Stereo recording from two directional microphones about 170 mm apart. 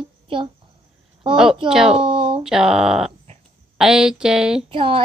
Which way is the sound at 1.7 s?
5° right (ahead or behind).